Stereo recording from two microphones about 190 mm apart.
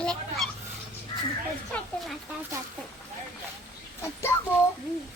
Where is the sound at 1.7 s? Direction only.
10° left (ahead or behind).